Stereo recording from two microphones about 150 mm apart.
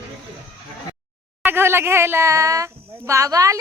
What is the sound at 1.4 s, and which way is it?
A woman's voice, 15° right (ahead or behind).